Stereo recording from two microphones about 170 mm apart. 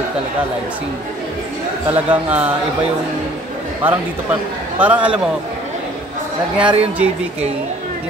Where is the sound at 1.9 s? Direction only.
10° right (ahead or behind).